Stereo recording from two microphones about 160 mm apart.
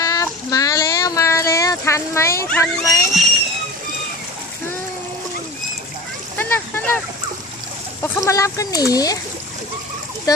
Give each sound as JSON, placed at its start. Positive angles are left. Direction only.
{"t": 0.0, "sound": "child singing", "side_deg": 20}
{"t": 2.5, "sound": "speech", "side_deg": 20}
{"t": 6.3, "sound": "speech", "side_deg": 10}
{"t": 8.0, "sound": "speech", "side_deg": 20}